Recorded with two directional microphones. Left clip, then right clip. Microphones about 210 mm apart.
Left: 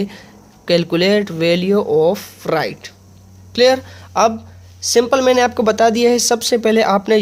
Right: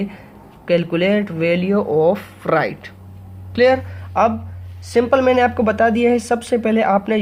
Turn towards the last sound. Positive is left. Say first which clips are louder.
# left 3 dB
turn(degrees=45)  # may be behind; listen again after turning